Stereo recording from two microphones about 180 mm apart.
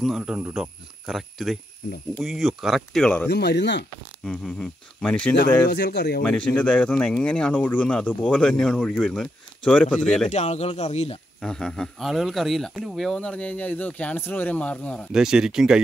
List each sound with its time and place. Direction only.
0.0 s speech: 5° right (ahead or behind)
3.3 s speech: 70° left (ahead or behind)
4.2 s speech: 5° left (ahead or behind)
5.7 s speech: 65° left (ahead or behind)
6.2 s speech: 5° left (ahead or behind)
10.3 s speech: 40° left (ahead or behind)
11.4 s speech: 5° left (ahead or behind)
15.1 s speech: 5° right (ahead or behind)